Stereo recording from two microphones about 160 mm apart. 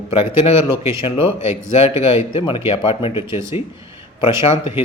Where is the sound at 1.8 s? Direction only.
40° left (ahead or behind).